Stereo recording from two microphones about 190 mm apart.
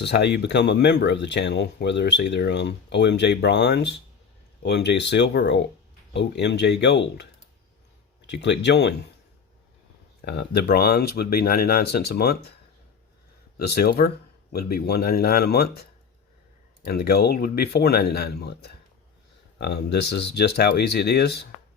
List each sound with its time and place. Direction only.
0.0 s speech: 65° left (ahead or behind)
8.3 s speech: 65° left (ahead or behind)
10.2 s speech: 55° left (ahead or behind)
13.6 s speech: 55° left (ahead or behind)